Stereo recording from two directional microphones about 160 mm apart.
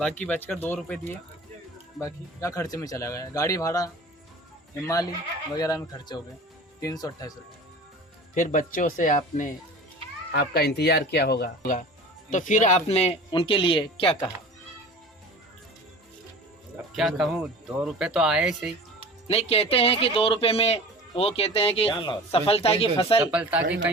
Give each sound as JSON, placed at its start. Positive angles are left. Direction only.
{"t": 0.0, "sound": "speech", "side_deg": 10}
{"t": 2.0, "sound": "speech", "side_deg": 20}
{"t": 8.4, "sound": "speech", "side_deg": 55}
{"t": 10.3, "sound": "speech", "side_deg": 85}
{"t": 12.3, "sound": "speech", "side_deg": 50}
{"t": 16.7, "sound": "speech", "side_deg": -5}
{"t": 19.3, "sound": "speech", "side_deg": 40}
{"t": 23.2, "sound": "speech", "side_deg": -10}